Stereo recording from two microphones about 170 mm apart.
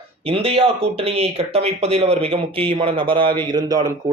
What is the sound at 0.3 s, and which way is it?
Speech, 35° right (ahead or behind).